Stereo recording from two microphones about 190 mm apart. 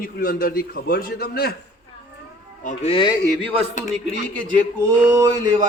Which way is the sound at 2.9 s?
25° left (ahead or behind).